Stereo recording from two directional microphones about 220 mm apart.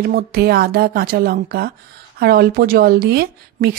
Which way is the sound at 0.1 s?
45° right (ahead or behind).